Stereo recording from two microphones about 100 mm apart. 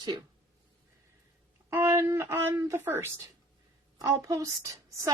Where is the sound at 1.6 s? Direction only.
25° right (ahead or behind).